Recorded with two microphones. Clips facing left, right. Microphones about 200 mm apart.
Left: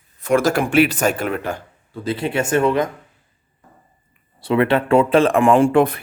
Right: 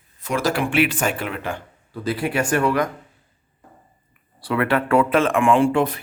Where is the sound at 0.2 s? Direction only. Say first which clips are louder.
Left 5 dB; 55° left (ahead or behind).